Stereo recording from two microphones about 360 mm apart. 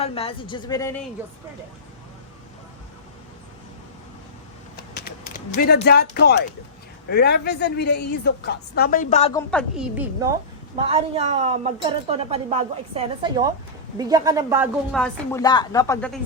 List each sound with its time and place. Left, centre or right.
0.0 s speech: centre
4.8 s a woman's voice: left
9.5 s speech: centre
10.8 s speech: centre